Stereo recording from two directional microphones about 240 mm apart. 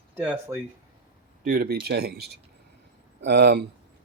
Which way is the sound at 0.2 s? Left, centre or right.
Centre.